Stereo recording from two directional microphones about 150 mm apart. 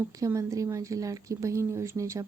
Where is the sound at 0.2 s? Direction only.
20° right (ahead or behind).